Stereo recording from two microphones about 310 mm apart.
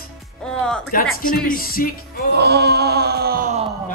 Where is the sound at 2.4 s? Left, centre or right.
Right.